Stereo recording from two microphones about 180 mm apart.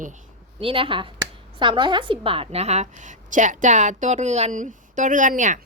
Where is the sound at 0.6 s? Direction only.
30° right (ahead or behind).